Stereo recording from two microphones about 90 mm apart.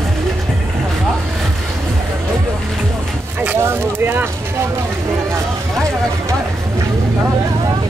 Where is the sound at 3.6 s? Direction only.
25° right (ahead or behind).